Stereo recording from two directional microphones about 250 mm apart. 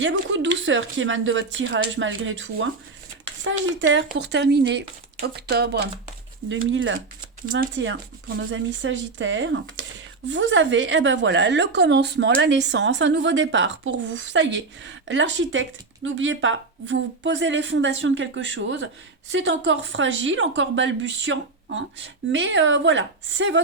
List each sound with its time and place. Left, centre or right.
0.0 s a woman's voice: right
3.8 s a woman's voice: right